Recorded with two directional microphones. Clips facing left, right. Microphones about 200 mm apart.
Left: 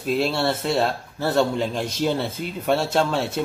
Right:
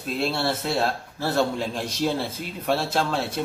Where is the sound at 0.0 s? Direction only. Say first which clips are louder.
Left 4 dB; centre (ahead or behind).